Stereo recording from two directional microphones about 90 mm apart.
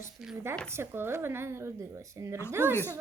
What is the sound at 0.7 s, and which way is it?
Speech, 25° right (ahead or behind).